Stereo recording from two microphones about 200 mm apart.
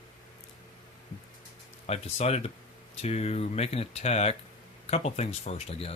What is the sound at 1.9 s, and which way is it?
Speech, 30° left (ahead or behind).